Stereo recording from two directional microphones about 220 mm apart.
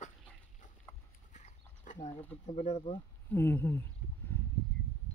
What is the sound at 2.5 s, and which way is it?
Speech, 30° left (ahead or behind).